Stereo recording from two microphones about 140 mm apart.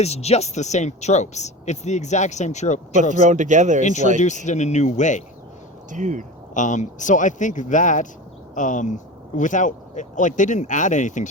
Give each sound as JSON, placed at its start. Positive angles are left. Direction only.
{"t": 0.0, "sound": "speech", "side_deg": 50}
{"t": 2.9, "sound": "speech", "side_deg": -60}
{"t": 3.8, "sound": "speech", "side_deg": 60}
{"t": 5.9, "sound": "speech", "side_deg": -60}
{"t": 6.5, "sound": "speech", "side_deg": 60}